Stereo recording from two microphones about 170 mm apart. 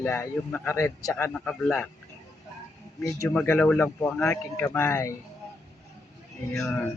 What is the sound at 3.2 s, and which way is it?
Speech, 10° left (ahead or behind).